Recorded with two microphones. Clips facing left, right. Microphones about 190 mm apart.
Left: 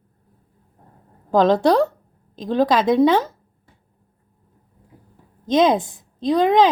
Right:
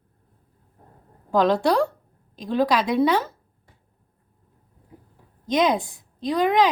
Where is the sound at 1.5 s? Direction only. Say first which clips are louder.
Left 5 dB; 20° left (ahead or behind).